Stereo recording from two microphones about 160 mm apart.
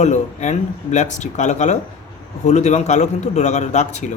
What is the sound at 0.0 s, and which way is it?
Speech, 45° left (ahead or behind).